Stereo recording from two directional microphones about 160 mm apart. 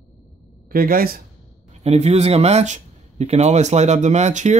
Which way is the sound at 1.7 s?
45° right (ahead or behind).